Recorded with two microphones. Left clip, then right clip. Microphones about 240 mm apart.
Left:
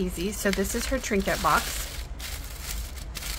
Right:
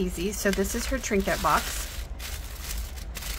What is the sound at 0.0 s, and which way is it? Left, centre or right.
Speech, centre.